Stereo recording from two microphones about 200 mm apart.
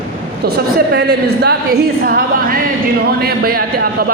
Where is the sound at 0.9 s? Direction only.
55° right (ahead or behind).